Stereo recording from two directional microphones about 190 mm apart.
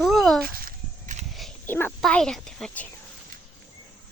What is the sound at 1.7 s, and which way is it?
Speech, 10° left (ahead or behind).